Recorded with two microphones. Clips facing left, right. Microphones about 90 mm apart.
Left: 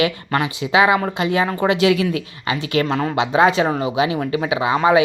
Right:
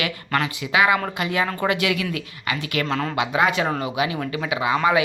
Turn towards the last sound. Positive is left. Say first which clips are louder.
# left 4 dB
turn(degrees=25)  # may be behind; listen again after turning